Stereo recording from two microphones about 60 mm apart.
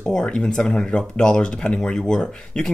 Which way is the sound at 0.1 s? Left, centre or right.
Centre.